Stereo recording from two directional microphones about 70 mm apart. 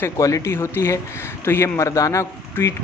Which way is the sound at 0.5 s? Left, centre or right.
Left.